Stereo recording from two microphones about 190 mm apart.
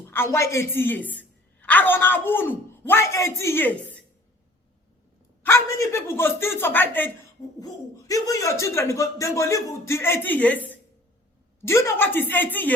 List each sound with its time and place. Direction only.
0.1 s a man's voice: 15° left (ahead or behind)
5.4 s a man's voice: 15° left (ahead or behind)